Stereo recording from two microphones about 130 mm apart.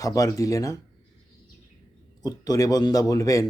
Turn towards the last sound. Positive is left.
turn(degrees=25)  # may be behind; listen again after turning